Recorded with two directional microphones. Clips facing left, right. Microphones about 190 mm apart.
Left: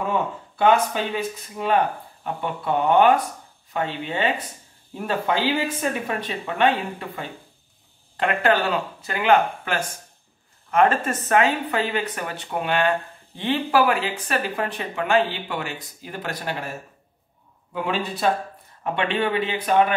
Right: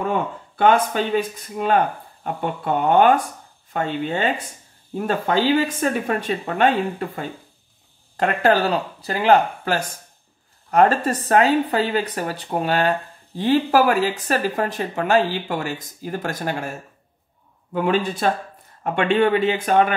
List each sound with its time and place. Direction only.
0.6 s speech: 50° right (ahead or behind)
2.2 s speech: 45° right (ahead or behind)
17.7 s speech: 50° right (ahead or behind)